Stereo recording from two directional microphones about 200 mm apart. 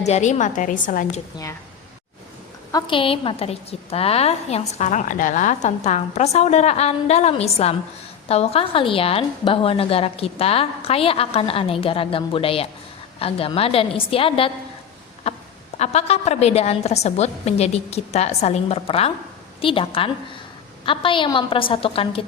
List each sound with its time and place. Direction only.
0.0 s a woman's voice: 35° left (ahead or behind)
2.7 s a woman's voice: 25° left (ahead or behind)
15.3 s a sound: 30° left (ahead or behind)
15.8 s a woman's voice: 35° left (ahead or behind)